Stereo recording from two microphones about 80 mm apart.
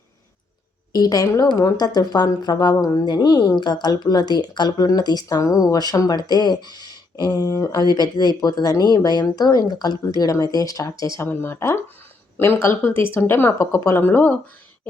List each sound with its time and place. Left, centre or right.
0.9 s speech: left
11.3 s speech: left